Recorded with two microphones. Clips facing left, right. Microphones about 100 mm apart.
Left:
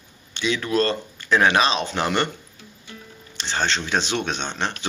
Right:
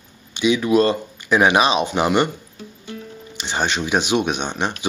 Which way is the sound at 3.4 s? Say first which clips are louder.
Right 2 dB; 15° right (ahead or behind).